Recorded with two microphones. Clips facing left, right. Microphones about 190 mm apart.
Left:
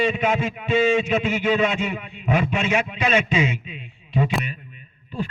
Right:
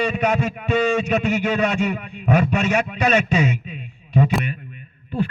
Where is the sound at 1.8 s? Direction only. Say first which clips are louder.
Right 4 dB; 45° right (ahead or behind).